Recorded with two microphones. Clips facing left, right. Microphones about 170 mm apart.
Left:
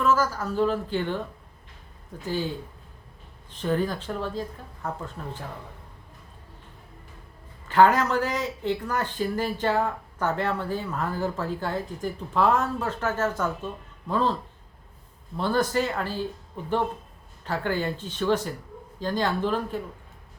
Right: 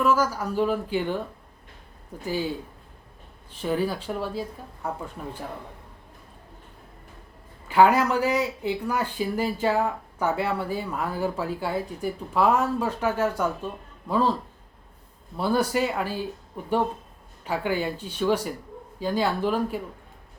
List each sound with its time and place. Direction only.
0.0 s speech: 10° right (ahead or behind)
2.2 s speech: 10° right (ahead or behind)
3.5 s speech: 10° right (ahead or behind)
7.7 s speech: 10° right (ahead or behind)
15.4 s speech: 10° right (ahead or behind)
17.4 s speech: 10° right (ahead or behind)